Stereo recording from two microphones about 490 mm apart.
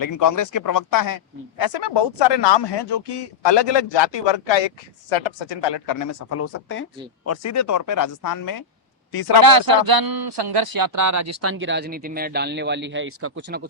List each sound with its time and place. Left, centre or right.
0.0 s speech: left
9.4 s speech: right